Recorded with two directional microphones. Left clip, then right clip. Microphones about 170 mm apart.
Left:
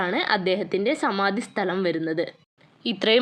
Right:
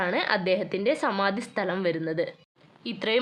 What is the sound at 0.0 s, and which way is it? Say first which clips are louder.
Speech: left 2 dB; 15° left (ahead or behind).